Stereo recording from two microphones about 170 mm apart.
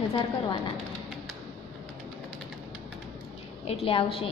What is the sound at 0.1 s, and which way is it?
Speech, 30° left (ahead or behind).